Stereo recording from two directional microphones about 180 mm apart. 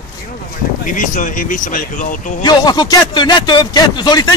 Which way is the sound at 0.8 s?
45° left (ahead or behind).